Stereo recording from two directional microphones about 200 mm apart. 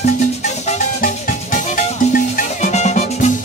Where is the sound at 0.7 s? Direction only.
40° left (ahead or behind).